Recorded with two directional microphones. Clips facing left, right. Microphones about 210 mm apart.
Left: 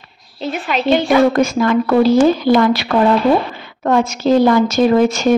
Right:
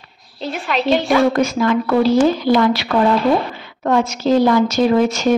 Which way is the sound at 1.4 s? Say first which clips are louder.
Left 2 dB; 50° left (ahead or behind).